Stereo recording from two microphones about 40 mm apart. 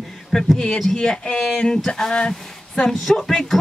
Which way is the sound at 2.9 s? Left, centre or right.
Centre.